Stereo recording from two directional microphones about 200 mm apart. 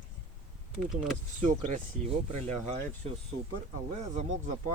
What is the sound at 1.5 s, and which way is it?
Speech, 40° right (ahead or behind).